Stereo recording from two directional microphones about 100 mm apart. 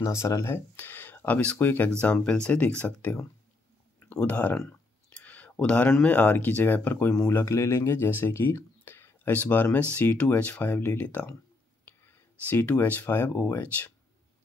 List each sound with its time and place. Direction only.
0.0 s speech: 35° left (ahead or behind); by 3.2 s 15° left (ahead or behind)
4.1 s clicking: 20° left (ahead or behind)
5.9 s speech: 20° left (ahead or behind)
7.2 s speech: 30° left (ahead or behind)
12.4 s speech: 20° left (ahead or behind)